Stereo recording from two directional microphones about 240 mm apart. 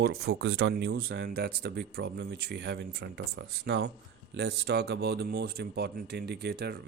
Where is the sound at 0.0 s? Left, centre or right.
Right.